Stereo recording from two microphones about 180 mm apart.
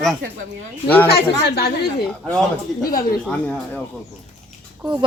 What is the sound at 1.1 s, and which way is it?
Speech, 60° left (ahead or behind).